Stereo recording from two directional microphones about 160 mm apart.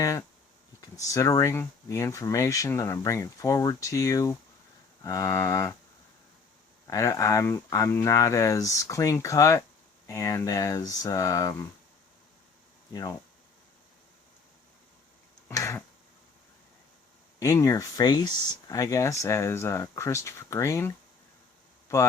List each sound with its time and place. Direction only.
0.0 s speech: 20° left (ahead or behind)
6.8 s speech: 20° left (ahead or behind)
12.9 s speech: 20° left (ahead or behind)
15.4 s tick-tock: 20° left (ahead or behind)
17.4 s speech: 20° left (ahead or behind)